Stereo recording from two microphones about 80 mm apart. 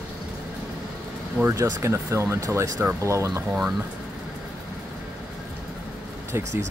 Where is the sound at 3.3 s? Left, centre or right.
Centre.